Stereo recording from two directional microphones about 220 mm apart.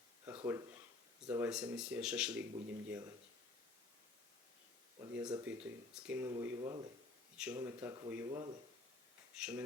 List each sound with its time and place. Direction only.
0.3 s a sound: 10° right (ahead or behind)
1.3 s speech: 5° right (ahead or behind)
4.9 s speech: 15° right (ahead or behind)
6.6 s speech: 20° right (ahead or behind)
7.3 s speech: 10° right (ahead or behind)
9.3 s speech: 5° right (ahead or behind)